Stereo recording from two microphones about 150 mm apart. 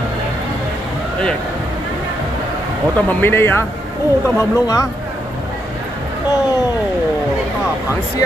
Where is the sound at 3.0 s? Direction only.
15° left (ahead or behind).